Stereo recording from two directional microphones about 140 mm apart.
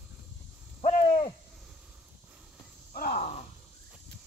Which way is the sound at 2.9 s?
90° left.